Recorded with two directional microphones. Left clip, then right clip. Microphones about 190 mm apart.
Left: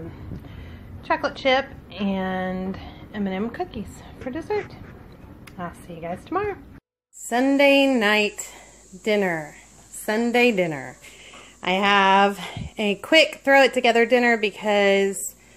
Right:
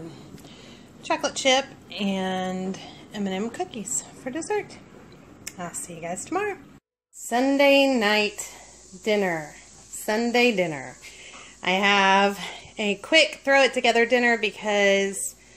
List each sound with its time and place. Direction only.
1.0 s a woman's voice: 15° right (ahead or behind)
5.6 s a woman's voice: 10° right (ahead or behind)
7.2 s speech: centre (ahead or behind)